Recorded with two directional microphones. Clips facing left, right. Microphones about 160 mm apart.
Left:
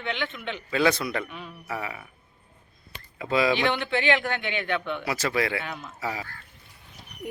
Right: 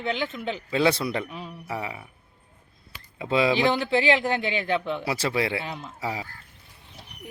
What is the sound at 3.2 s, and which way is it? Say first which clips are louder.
Speech: right 1 dB; 25° right (ahead or behind).